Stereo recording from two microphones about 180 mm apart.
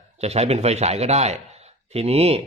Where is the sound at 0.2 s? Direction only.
35° right (ahead or behind).